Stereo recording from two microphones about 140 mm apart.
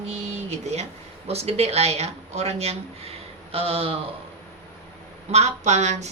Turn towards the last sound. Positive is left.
turn(degrees=-55)  # may be behind; listen again after turning